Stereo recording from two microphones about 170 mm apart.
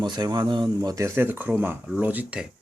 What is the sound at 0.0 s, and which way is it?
Speech, 25° right (ahead or behind).